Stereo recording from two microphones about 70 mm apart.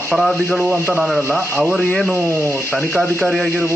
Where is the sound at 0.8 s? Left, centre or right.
Left.